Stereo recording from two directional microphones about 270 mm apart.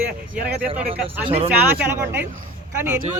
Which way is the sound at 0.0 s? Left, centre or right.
Centre.